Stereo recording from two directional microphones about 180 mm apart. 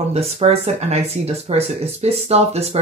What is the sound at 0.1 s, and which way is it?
Speech, 35° right (ahead or behind).